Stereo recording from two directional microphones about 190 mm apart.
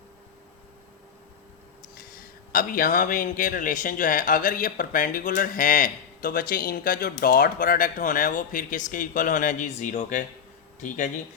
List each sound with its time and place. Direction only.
2.0 s a man's voice: 50° left (ahead or behind)